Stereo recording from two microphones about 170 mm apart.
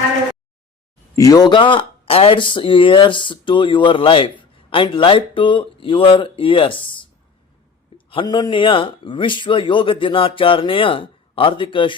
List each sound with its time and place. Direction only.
1.1 s speech: 20° left (ahead or behind)